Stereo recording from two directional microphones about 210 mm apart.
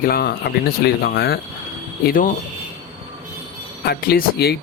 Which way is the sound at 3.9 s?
50° left (ahead or behind).